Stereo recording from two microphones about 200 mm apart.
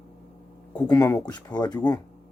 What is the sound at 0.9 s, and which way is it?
Speech, 15° left (ahead or behind).